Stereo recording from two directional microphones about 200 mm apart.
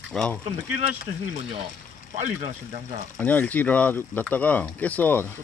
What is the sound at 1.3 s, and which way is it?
Speech, 30° right (ahead or behind).